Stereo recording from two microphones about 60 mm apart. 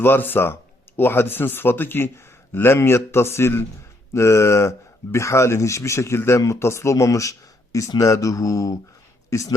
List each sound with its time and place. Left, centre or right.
0.0 s a man's voice: left
9.3 s speech: left